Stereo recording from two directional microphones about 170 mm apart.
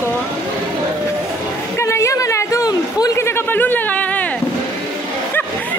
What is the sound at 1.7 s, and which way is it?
Speech, 15° left (ahead or behind).